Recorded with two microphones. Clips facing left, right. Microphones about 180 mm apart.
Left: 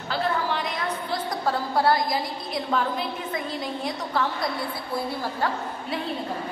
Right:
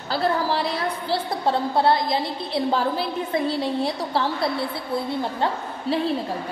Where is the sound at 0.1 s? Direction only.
35° right (ahead or behind).